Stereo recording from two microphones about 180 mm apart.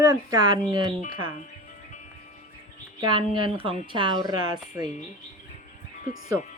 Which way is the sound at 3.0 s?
30° right (ahead or behind).